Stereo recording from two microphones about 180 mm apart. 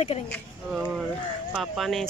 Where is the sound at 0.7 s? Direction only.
5° right (ahead or behind).